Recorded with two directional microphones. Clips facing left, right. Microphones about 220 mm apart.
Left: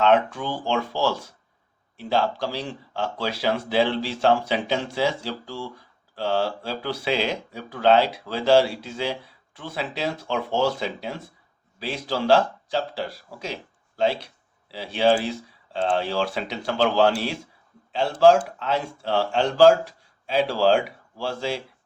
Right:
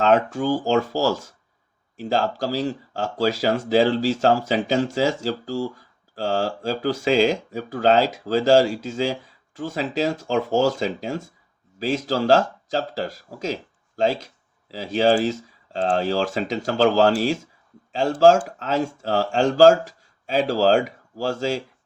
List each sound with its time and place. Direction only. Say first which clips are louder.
0.0 s speech: right 1 dB; 40° right (ahead or behind)